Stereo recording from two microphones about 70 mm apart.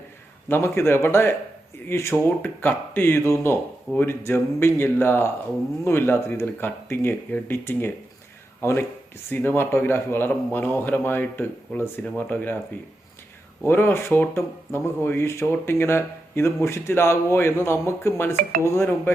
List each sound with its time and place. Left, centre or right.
0.4 s speech: left
2.4 s a man's voice: left
13.7 s speech: left